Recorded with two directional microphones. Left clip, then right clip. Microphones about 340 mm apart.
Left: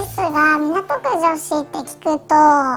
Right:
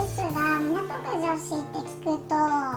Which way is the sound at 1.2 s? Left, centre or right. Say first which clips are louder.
Left 11 dB; left.